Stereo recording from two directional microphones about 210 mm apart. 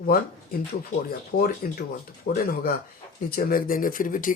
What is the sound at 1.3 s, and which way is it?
Speech, 45° left (ahead or behind).